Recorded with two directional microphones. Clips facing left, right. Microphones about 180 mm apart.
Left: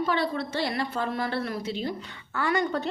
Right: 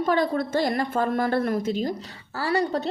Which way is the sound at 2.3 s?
35° right (ahead or behind).